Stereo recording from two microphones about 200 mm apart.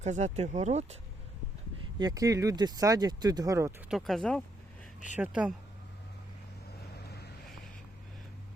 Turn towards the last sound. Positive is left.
turn(degrees=55)  # may be behind; listen again after turning